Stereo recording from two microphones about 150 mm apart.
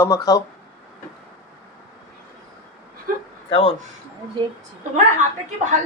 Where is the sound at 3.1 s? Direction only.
75° right (ahead or behind).